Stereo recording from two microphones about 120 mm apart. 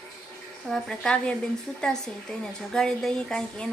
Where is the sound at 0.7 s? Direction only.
5° left (ahead or behind).